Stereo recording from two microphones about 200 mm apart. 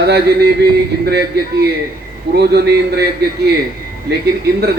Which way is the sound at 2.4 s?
55° right (ahead or behind).